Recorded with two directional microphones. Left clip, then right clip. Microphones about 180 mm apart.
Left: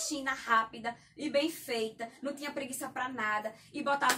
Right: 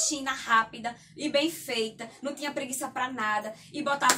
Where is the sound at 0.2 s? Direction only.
20° right (ahead or behind).